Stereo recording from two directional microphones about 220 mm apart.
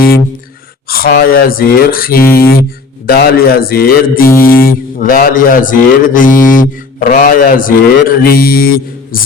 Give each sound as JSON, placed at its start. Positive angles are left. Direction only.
{"t": 0.9, "sound": "mantra", "side_deg": 40}